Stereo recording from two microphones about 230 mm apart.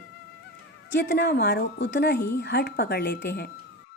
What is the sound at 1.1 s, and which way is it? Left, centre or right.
Speech, left.